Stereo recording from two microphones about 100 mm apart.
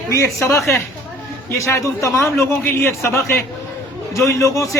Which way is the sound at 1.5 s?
25° left (ahead or behind).